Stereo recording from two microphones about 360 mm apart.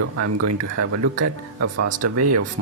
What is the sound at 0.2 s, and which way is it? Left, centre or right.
Speech, right.